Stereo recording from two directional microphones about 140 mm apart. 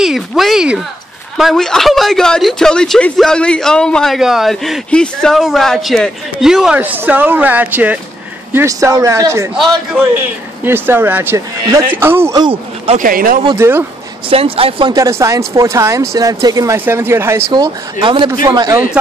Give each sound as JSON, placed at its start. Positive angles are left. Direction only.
{"t": 0.0, "sound": "speech", "side_deg": 0}
{"t": 8.5, "sound": "speech", "side_deg": -20}
{"t": 9.6, "sound": "speech", "side_deg": 0}
{"t": 10.1, "sound": "speech", "side_deg": -15}
{"t": 12.4, "sound": "speech", "side_deg": -35}
{"t": 12.9, "sound": "speech", "side_deg": -85}
{"t": 13.6, "sound": "speech", "side_deg": -15}
{"t": 14.3, "sound": "speech", "side_deg": -45}
{"t": 15.0, "sound": "speech", "side_deg": -20}
{"t": 18.0, "sound": "speech", "side_deg": -30}